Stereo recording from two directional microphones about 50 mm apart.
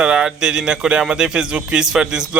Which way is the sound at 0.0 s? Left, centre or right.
Centre.